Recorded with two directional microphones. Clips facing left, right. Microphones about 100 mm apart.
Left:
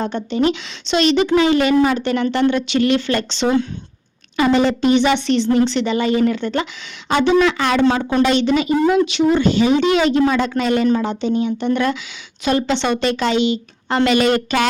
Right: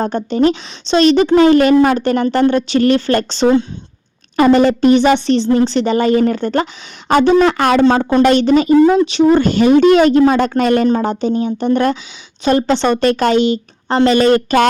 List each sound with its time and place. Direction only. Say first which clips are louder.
0.0 s a woman's voice: right 4 dB; 40° right (ahead or behind)